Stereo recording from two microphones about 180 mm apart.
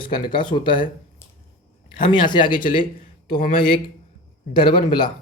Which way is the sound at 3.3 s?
55° left (ahead or behind).